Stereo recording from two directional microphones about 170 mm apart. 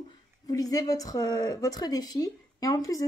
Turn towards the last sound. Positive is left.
turn(degrees=20)  # may be behind; listen again after turning